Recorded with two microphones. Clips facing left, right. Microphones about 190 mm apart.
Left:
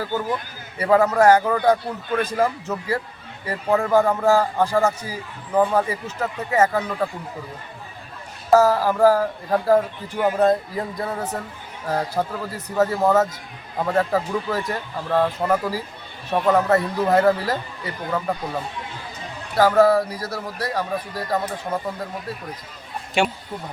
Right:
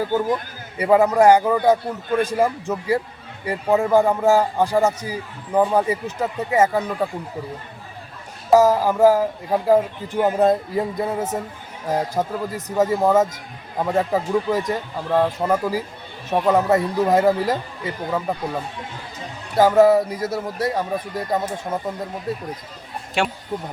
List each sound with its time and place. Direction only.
0.0 s a man's voice: 15° right (ahead or behind)
8.5 s a man's voice: 15° right (ahead or behind)
10.2 s a man's voice: 25° right (ahead or behind)
19.5 s speech: 20° right (ahead or behind)
23.2 s speech: centre (ahead or behind)